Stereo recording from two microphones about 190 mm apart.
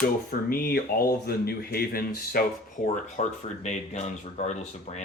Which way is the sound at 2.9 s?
35° left (ahead or behind).